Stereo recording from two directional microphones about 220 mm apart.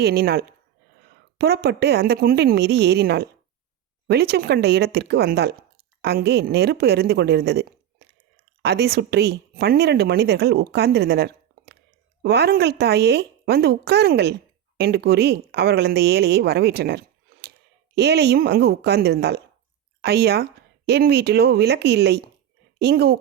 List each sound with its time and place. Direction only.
0.0 s a woman's voice: 45° right (ahead or behind)